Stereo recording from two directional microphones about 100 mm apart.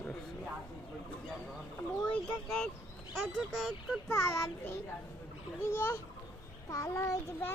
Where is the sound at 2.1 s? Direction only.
10° left (ahead or behind).